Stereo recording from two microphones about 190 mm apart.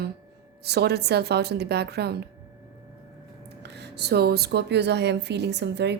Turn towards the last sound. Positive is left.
turn(degrees=-60)  # may be behind; listen again after turning